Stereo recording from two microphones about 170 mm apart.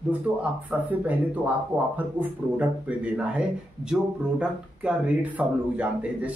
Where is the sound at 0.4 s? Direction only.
10° right (ahead or behind).